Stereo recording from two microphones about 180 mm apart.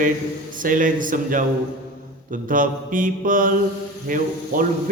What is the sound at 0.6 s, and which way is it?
Mantra, 50° right (ahead or behind).